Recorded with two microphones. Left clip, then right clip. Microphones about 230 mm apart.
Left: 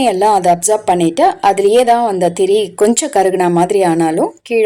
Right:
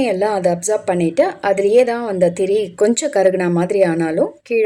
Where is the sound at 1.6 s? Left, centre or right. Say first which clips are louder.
Left 3 dB; left.